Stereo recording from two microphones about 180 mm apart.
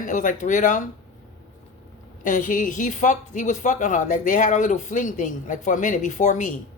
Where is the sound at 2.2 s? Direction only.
45° left (ahead or behind).